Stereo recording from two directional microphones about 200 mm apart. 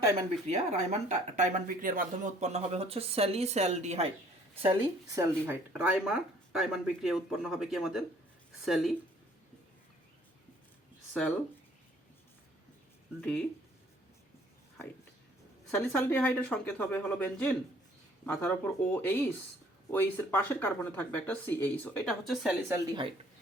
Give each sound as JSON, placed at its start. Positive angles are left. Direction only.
{"t": 0.4, "sound": "speech", "side_deg": -35}
{"t": 4.6, "sound": "speech", "side_deg": -20}
{"t": 5.7, "sound": "speech", "side_deg": -5}
{"t": 15.7, "sound": "speech", "side_deg": 10}
{"t": 22.7, "sound": "speech", "side_deg": -20}